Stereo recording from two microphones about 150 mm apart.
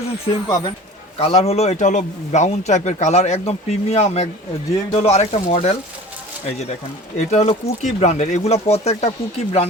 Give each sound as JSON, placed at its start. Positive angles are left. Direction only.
{"t": 0.4, "sound": "speech", "side_deg": 30}
{"t": 1.2, "sound": "a man's voice", "side_deg": 40}
{"t": 7.3, "sound": "a man's voice", "side_deg": 45}